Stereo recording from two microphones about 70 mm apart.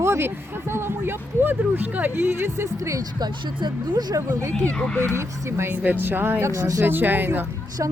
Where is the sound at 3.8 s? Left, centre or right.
Right.